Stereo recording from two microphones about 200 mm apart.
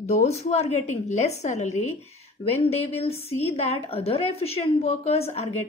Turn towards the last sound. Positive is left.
turn(degrees=30)  # may be behind; listen again after turning